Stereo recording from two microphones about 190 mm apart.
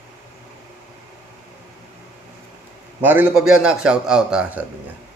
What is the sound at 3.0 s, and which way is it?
A man's voice, 5° right (ahead or behind).